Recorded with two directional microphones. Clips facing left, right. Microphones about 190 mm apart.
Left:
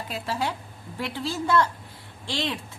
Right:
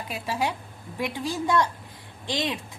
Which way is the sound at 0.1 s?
15° right (ahead or behind).